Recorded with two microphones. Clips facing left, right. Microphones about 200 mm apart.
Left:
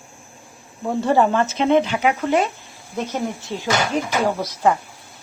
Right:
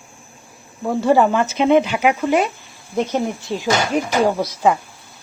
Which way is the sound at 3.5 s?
20° right (ahead or behind).